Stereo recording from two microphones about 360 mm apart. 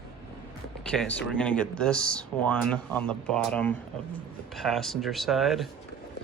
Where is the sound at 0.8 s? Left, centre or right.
Centre.